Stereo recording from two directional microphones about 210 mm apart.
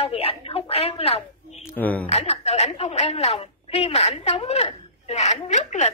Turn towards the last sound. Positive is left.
turn(degrees=35)  # may be behind; listen again after turning